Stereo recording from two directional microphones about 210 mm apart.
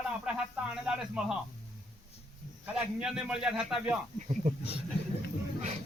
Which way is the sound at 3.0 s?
5° right (ahead or behind).